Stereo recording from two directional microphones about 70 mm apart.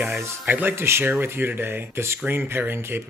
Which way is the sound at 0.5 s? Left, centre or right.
Right.